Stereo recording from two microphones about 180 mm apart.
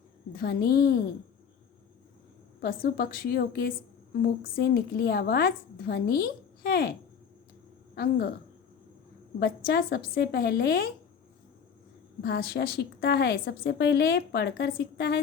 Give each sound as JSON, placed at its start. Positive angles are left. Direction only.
{"t": 0.3, "sound": "a woman's voice", "side_deg": 60}
{"t": 2.6, "sound": "a woman's voice", "side_deg": 55}
{"t": 7.9, "sound": "a woman's voice", "side_deg": 60}
{"t": 9.6, "sound": "a woman's voice", "side_deg": 55}
{"t": 12.2, "sound": "a woman's voice", "side_deg": 60}